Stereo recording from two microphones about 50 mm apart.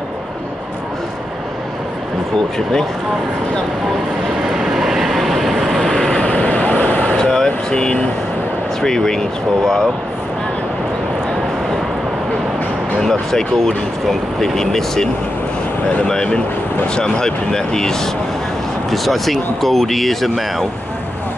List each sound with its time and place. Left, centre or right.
4.6 s vehicle: centre
6.2 s vehicle: left
7.2 s air conditioning: centre
8.8 s speech: centre
13.0 s speech: centre